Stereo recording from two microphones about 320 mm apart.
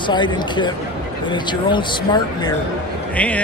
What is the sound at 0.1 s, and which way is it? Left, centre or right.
A man's voice, centre.